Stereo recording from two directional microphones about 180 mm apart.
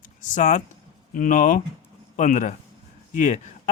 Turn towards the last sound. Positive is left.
turn(degrees=45)  # may be behind; listen again after turning